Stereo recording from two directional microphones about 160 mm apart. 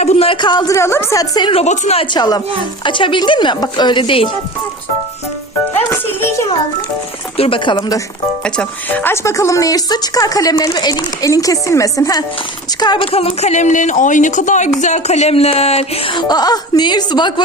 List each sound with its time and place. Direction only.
0.0 s a woman's voice: 40° left (ahead or behind)
1.6 s speech: 45° left (ahead or behind)
5.9 s a child's voice: 15° left (ahead or behind)
7.3 s speech: 35° left (ahead or behind)
8.4 s a woman's voice: 10° left (ahead or behind); by 13.1 s 25° left (ahead or behind)
13.1 s speech: 40° left (ahead or behind)